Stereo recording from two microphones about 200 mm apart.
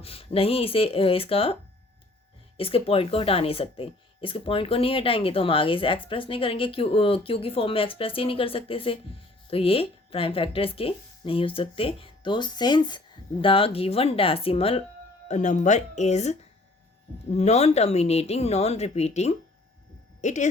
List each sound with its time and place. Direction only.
0.0 s speech: 30° left (ahead or behind)
2.6 s speech: 30° left (ahead or behind)